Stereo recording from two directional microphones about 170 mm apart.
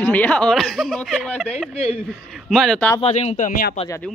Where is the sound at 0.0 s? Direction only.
10° left (ahead or behind).